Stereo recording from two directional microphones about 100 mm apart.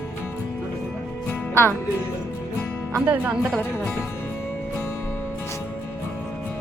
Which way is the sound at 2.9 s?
15° right (ahead or behind).